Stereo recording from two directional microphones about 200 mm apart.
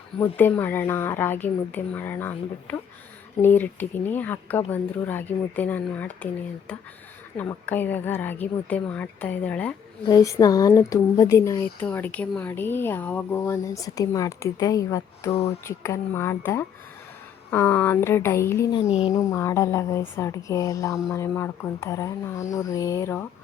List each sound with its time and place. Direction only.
0.2 s speech: 10° left (ahead or behind)
7.3 s speech: 10° left (ahead or behind)
10.0 s speech: 20° left (ahead or behind)